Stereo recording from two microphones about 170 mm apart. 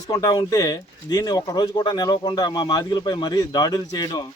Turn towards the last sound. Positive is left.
turn(degrees=25)  # may be behind; listen again after turning